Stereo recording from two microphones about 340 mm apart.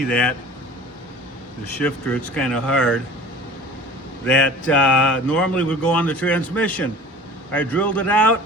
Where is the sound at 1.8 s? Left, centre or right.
Centre.